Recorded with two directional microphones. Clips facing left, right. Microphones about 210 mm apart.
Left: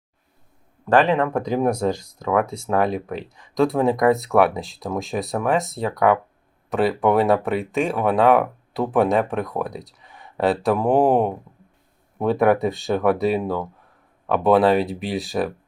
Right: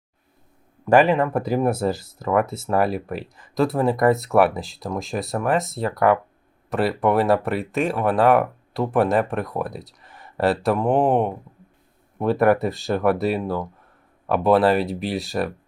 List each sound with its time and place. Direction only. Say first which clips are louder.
0.9 s speech: right 1 dB; 10° right (ahead or behind)